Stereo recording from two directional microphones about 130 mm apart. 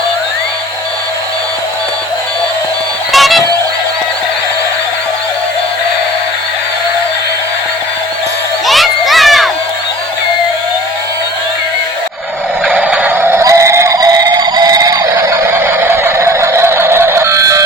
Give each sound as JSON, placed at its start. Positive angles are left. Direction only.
{"t": 3.1, "sound": "music", "side_deg": 0}
{"t": 8.6, "sound": "crowd", "side_deg": 0}
{"t": 12.6, "sound": "synthetic singing", "side_deg": -10}
{"t": 15.5, "sound": "a sound", "side_deg": -20}